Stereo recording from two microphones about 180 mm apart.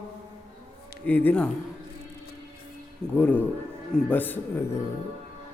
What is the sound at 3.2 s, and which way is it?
A man's voice, 10° left (ahead or behind).